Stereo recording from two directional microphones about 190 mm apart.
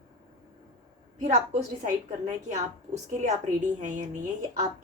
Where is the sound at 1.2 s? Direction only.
35° right (ahead or behind).